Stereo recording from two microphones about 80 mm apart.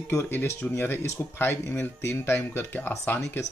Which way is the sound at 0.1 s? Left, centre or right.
Left.